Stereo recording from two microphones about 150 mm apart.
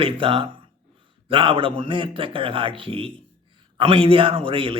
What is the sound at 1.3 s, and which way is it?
A man's voice, 35° right (ahead or behind).